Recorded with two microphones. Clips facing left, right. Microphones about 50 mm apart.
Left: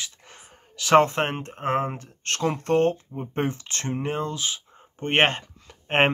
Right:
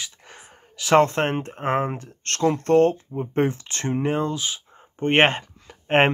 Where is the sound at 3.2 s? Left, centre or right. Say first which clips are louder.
Right 5 dB; centre.